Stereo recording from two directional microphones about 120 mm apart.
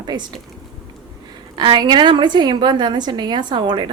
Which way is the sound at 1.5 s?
40° right (ahead or behind).